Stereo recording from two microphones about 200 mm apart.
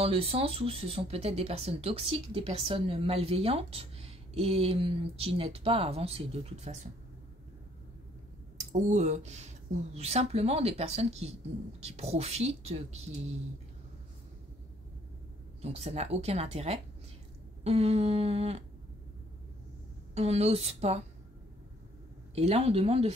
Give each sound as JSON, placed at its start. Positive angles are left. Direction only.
{"t": 0.0, "sound": "speech", "side_deg": -30}
{"t": 8.5, "sound": "speech", "side_deg": -35}
{"t": 15.6, "sound": "speech", "side_deg": -30}
{"t": 20.2, "sound": "speech", "side_deg": -30}
{"t": 22.3, "sound": "speech", "side_deg": -30}